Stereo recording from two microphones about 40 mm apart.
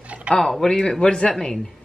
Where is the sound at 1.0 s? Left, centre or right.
Left.